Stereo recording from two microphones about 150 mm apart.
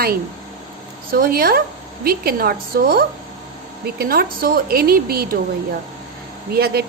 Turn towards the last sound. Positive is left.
turn(degrees=-90)